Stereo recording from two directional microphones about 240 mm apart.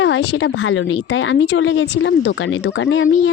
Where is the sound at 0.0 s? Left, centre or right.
Left.